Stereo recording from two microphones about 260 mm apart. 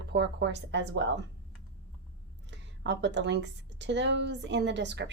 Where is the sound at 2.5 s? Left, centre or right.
Right.